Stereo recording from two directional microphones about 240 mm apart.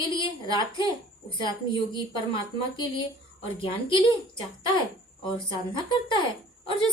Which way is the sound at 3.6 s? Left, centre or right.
Left.